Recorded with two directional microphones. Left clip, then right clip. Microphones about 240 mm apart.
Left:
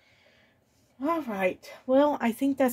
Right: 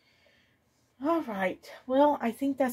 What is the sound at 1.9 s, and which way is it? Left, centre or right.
Speech, left.